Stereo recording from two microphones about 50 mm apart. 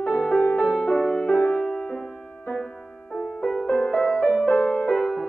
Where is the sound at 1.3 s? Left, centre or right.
Left.